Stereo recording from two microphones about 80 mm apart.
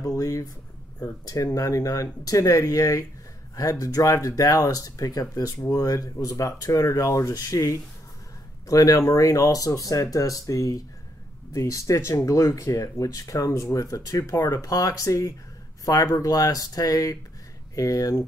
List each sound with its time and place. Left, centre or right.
0.0 s speech: left